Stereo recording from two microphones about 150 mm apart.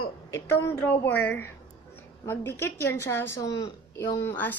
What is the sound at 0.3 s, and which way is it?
Speech, 15° left (ahead or behind).